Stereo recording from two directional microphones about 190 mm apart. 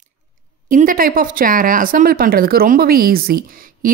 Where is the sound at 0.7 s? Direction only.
45° right (ahead or behind).